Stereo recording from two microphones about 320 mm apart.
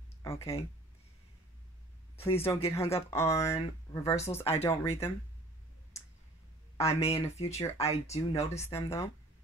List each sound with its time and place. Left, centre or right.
0.2 s speech: centre
2.1 s speech: centre
6.8 s speech: centre